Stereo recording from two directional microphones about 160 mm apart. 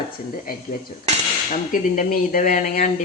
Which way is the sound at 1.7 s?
55° left (ahead or behind).